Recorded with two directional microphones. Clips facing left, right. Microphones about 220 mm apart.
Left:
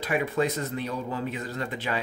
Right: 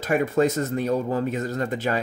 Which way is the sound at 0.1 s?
45° right (ahead or behind).